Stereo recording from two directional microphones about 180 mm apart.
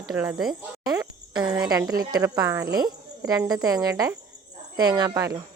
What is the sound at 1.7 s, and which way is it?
Speech, 20° right (ahead or behind).